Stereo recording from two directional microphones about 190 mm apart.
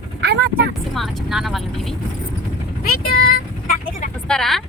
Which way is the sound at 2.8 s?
50° left (ahead or behind).